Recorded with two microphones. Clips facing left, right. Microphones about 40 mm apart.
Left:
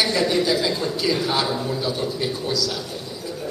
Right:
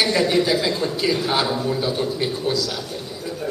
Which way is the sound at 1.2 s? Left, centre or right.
Centre.